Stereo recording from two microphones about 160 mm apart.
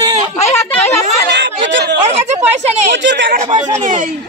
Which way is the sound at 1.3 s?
90° right.